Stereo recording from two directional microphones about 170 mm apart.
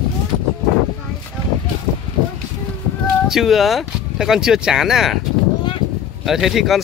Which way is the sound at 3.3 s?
Centre (ahead or behind).